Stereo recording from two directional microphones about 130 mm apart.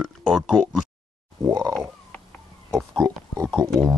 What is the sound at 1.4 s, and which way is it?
Grunt, 25° right (ahead or behind).